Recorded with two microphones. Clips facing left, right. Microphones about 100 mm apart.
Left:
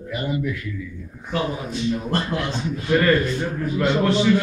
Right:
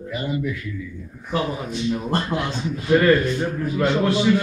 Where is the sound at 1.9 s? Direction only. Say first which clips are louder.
Right 1 dB; 20° right (ahead or behind).